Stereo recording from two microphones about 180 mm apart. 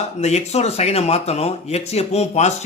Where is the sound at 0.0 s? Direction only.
40° left (ahead or behind).